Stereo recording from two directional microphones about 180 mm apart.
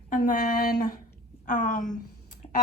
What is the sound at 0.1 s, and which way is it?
A woman's voice, 50° left (ahead or behind).